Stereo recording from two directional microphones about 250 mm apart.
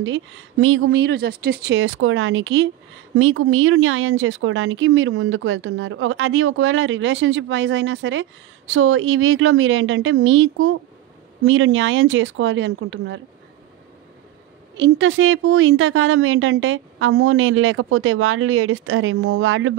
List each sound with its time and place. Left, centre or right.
0.0 s speech: right
14.8 s speech: right